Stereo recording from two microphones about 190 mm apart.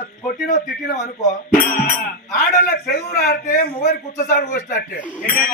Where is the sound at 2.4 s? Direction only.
50° left (ahead or behind).